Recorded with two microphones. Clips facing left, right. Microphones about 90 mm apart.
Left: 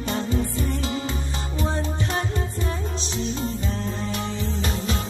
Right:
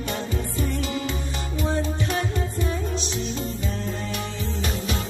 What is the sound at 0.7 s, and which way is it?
Music, 30° left (ahead or behind).